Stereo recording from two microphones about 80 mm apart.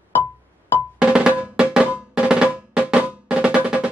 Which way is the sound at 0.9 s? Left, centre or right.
Centre.